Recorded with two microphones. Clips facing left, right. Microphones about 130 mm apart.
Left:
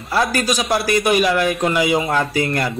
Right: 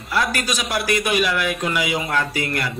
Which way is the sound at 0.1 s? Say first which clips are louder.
Left 4 dB; 35° left (ahead or behind).